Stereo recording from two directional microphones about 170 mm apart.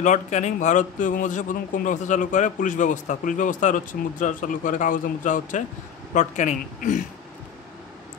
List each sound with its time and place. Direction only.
0.0 s a man's voice: 45° left (ahead or behind)